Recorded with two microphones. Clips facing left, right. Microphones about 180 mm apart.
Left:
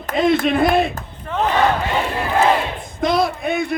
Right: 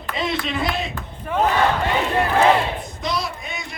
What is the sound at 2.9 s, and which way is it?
Speech, 55° left (ahead or behind).